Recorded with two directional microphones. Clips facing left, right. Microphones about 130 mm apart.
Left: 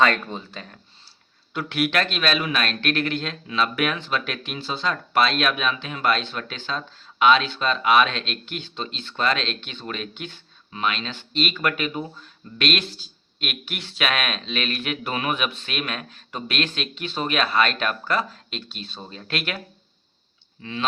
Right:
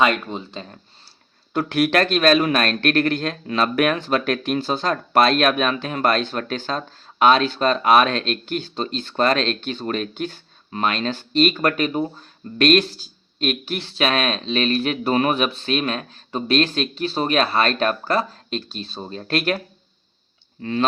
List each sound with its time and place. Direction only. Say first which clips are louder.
0.0 s speech: right 2 dB; 15° right (ahead or behind)
1.5 s speech: right 5 dB; 40° right (ahead or behind)